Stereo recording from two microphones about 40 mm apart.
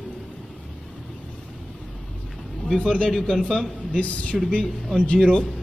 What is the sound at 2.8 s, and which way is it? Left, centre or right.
Speech, left.